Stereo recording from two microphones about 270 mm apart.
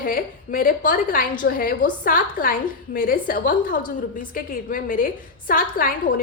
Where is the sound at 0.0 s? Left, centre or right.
Left.